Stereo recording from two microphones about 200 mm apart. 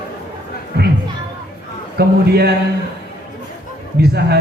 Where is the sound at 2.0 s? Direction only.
50° right (ahead or behind).